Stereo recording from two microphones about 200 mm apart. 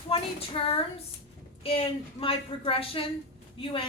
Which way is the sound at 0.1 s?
30° left (ahead or behind).